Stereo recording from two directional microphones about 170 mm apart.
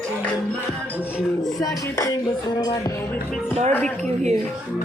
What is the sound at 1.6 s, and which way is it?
Speech, 20° left (ahead or behind).